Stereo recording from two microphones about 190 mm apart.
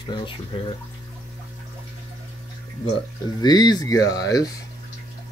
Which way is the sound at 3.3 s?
20° left (ahead or behind).